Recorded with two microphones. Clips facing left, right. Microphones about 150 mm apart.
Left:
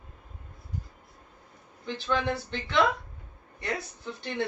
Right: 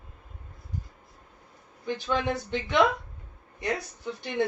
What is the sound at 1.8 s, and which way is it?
Speech, 15° right (ahead or behind).